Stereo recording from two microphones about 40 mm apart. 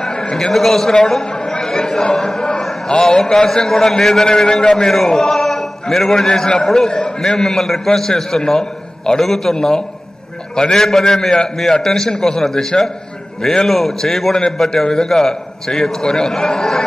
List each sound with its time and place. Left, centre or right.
0.1 s a man's voice: centre
13.7 s a man's voice: centre